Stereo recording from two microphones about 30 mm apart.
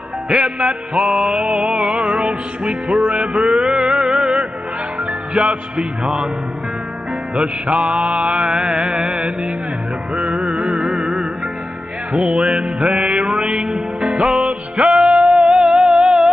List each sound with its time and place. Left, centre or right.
0.3 s music: right
1.0 s mantra: right
2.0 s music: right
3.3 s music: right
5.3 s music: right
6.0 s mantra: centre
7.3 s music: right
8.4 s mantra: right
10.3 s music: right
10.8 s music: centre
12.2 s music: right
15.5 s music: centre